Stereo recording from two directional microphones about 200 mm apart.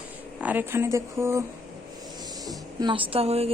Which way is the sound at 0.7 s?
15° right (ahead or behind).